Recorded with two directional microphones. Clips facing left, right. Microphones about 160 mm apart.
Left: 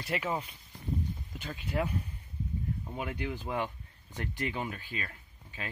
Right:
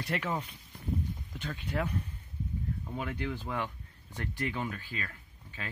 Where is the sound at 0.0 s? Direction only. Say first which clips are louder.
Even; 10° left (ahead or behind).